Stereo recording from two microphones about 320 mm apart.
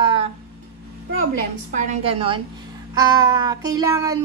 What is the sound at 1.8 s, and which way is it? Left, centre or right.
A woman's voice, centre.